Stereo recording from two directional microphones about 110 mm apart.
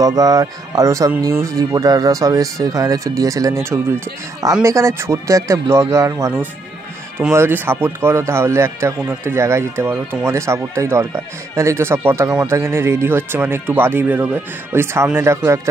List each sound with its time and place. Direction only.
0.0 s speech: 35° right (ahead or behind)